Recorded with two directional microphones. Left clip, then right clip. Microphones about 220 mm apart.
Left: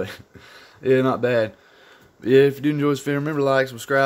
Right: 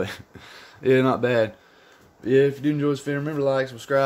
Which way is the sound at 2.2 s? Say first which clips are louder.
Left 3 dB; 25° left (ahead or behind).